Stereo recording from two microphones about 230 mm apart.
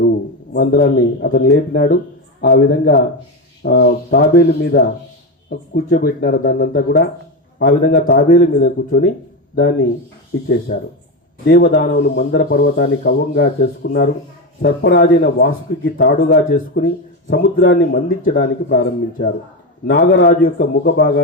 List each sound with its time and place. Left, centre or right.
0.5 s speech: left
11.4 s speech: left